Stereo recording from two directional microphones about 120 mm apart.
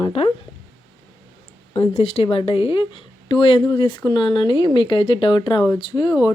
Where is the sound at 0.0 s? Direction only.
55° left (ahead or behind).